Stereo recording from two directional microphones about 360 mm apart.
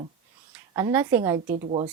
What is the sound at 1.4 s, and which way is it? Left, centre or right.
Speech, centre.